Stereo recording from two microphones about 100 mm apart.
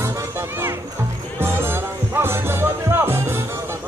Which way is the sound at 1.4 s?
25° right (ahead or behind).